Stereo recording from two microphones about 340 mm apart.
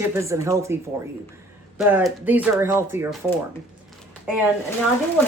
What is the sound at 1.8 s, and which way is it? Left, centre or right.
Speech, centre.